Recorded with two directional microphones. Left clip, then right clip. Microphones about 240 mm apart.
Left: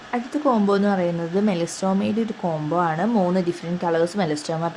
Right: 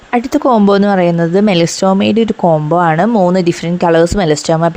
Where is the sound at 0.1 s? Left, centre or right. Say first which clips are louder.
Right 11 dB; right.